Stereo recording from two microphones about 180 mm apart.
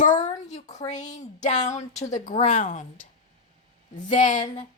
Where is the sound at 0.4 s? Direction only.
40° left (ahead or behind).